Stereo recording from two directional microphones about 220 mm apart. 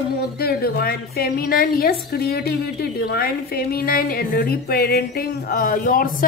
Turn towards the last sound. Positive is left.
turn(degrees=40)  # may be behind; listen again after turning